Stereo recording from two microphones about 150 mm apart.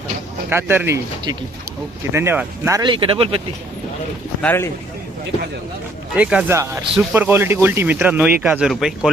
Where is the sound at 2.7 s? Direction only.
35° right (ahead or behind).